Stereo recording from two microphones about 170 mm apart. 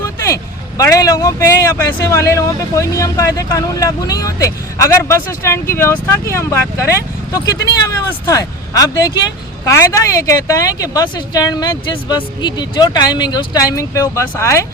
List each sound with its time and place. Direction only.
0.0 s vehicle: 20° left (ahead or behind)
0.8 s speech: 20° left (ahead or behind)